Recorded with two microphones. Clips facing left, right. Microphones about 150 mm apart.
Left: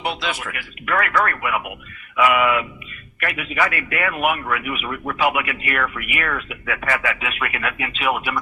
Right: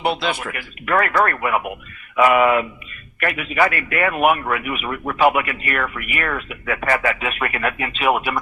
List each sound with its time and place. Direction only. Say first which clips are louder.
0.0 s a man's voice: right 4 dB; 30° right (ahead or behind)